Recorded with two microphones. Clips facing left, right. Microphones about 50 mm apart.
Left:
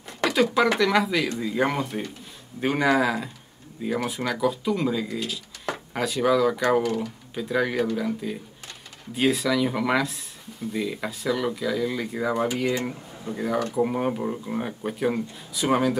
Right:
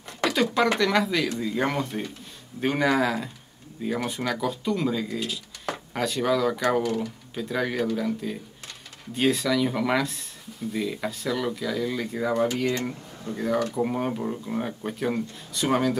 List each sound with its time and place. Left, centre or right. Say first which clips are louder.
0.2 s speech: left 2 dB; centre